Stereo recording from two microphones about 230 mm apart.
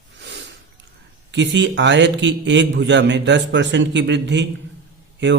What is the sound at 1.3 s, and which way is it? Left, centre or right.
A man's voice, right.